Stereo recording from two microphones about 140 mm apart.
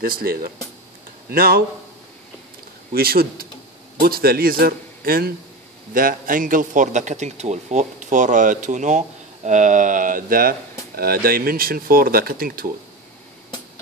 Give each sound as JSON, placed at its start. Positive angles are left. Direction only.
{"t": 0.0, "sound": "speech", "side_deg": -90}
{"t": 2.9, "sound": "speech", "side_deg": -90}